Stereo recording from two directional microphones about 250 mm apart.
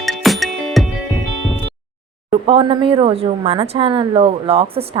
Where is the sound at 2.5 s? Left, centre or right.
Right.